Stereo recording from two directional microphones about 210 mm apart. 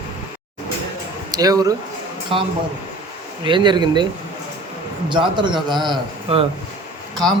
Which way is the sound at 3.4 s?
20° right (ahead or behind).